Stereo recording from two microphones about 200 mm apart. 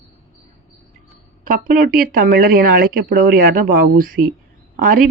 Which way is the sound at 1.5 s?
45° right (ahead or behind).